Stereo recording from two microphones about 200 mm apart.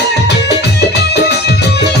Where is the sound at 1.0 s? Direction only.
55° left (ahead or behind).